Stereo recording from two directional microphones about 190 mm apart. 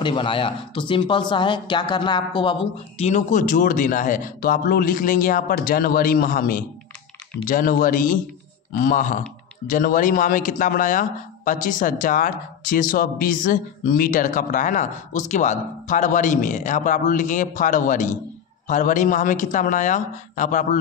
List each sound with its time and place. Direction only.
0.0 s a man's voice: 25° left (ahead or behind); by 20.8 s 40° left (ahead or behind)